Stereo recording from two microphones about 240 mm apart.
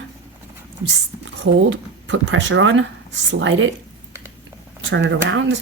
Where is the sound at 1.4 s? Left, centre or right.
Right.